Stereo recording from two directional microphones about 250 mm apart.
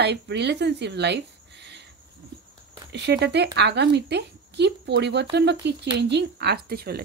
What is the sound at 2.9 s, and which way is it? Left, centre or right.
Speech, right.